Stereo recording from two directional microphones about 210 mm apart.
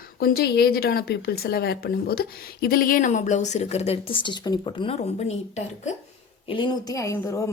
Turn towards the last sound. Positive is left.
turn(degrees=15)  # may be behind; listen again after turning